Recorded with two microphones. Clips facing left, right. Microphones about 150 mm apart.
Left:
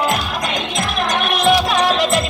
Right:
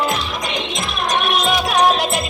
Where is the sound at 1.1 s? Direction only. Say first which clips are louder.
Left 3 dB; 70° left (ahead or behind); by 2.2 s 90° left.